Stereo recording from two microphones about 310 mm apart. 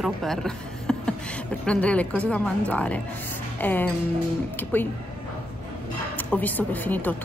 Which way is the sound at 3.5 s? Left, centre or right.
Centre.